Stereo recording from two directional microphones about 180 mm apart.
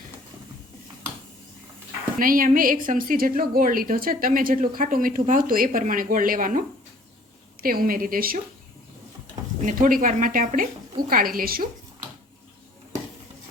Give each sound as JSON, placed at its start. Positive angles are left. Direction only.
{"t": 2.1, "sound": "a woman's voice", "side_deg": -50}
{"t": 9.6, "sound": "a woman's voice", "side_deg": -50}